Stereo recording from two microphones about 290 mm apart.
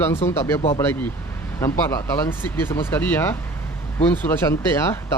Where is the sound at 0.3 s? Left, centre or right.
Centre.